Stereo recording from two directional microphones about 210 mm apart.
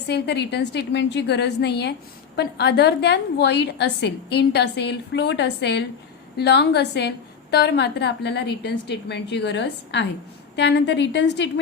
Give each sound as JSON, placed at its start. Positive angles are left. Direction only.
{"t": 0.1, "sound": "a woman's voice", "side_deg": 55}